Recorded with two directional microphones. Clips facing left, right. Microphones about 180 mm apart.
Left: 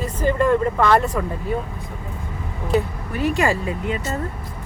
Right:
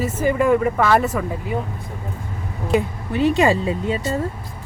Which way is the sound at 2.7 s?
25° right (ahead or behind).